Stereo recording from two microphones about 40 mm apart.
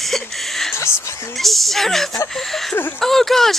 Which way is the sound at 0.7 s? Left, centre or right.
Left.